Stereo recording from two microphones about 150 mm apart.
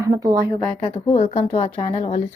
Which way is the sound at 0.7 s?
35° left (ahead or behind).